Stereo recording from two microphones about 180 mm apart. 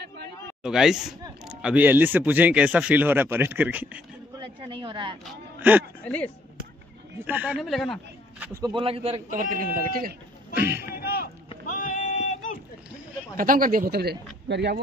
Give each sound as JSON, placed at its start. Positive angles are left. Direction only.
{"t": 0.7, "sound": "speech", "side_deg": -5}
{"t": 4.4, "sound": "a sound", "side_deg": -30}
{"t": 5.6, "sound": "speech", "side_deg": -10}
{"t": 6.0, "sound": "speech", "side_deg": 5}
{"t": 7.2, "sound": "speech", "side_deg": -10}
{"t": 8.5, "sound": "speech", "side_deg": -25}
{"t": 10.5, "sound": "speech", "side_deg": -10}
{"t": 10.8, "sound": "a sound", "side_deg": 60}
{"t": 13.4, "sound": "a man's voice", "side_deg": -50}